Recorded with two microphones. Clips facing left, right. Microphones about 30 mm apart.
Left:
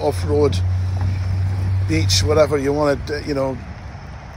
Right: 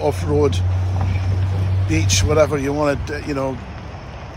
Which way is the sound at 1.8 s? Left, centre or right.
Left.